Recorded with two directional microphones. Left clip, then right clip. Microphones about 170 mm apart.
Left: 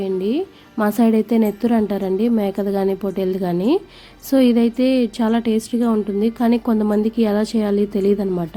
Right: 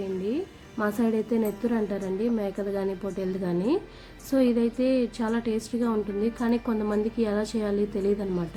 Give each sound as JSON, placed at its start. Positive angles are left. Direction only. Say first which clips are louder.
{"t": 0.3, "sound": "a woman's voice", "louder": "left 8 dB", "side_deg": 65}